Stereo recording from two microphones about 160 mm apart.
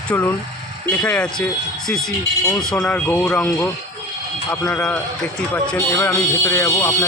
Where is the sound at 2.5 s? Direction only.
Centre (ahead or behind).